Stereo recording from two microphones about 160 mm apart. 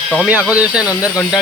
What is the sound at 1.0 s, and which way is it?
Speech, 20° left (ahead or behind).